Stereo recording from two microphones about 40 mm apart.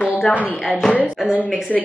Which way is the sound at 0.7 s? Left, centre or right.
Centre.